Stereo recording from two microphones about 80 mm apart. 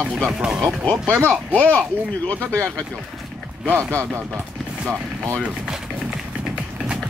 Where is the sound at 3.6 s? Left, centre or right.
Right.